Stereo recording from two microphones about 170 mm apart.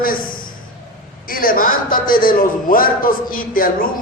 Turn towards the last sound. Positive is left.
turn(degrees=55)  # may be behind; listen again after turning